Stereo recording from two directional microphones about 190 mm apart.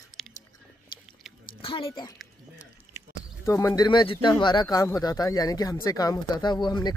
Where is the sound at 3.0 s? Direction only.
15° right (ahead or behind).